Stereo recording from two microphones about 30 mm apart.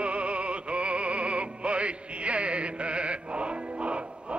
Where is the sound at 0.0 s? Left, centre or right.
Right.